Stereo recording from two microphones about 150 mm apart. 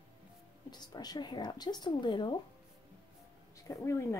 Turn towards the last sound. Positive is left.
turn(degrees=20)  # may be behind; listen again after turning